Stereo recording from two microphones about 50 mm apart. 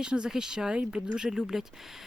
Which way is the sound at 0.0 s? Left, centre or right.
Centre.